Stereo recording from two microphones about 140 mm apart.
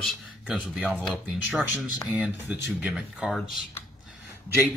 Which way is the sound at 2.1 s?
10° right (ahead or behind).